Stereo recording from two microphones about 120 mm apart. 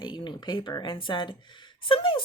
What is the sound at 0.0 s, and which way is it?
Speech, 40° left (ahead or behind).